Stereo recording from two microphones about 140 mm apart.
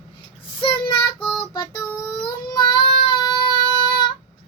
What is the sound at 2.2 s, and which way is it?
Child singing, 35° left (ahead or behind).